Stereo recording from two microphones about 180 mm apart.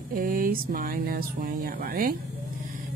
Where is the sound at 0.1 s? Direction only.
50° right (ahead or behind).